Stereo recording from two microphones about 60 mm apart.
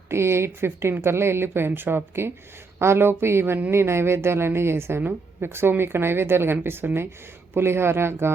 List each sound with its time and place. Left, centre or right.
0.1 s a woman's voice: right